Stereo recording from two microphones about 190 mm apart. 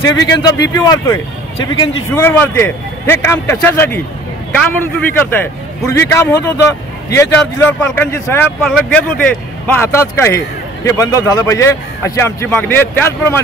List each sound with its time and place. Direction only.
0.0 s speech: 20° left (ahead or behind)
5.1 s speech: 10° left (ahead or behind)